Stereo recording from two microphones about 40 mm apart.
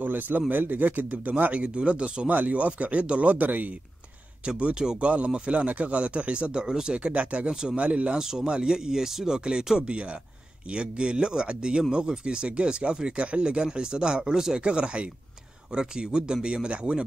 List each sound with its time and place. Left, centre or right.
0.0 s a man's voice: right
2.2 s speech: right
4.6 s speech: right
6.5 s speech: centre
7.0 s speech: right
8.2 s speech: centre
14.6 s speech: right